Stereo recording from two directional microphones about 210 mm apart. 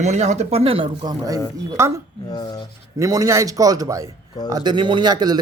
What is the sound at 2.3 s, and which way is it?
Speech, 20° left (ahead or behind).